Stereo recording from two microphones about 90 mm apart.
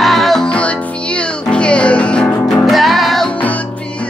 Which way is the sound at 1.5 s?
10° left (ahead or behind).